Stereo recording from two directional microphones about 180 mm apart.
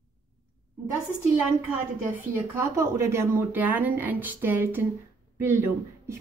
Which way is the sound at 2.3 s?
15° right (ahead or behind).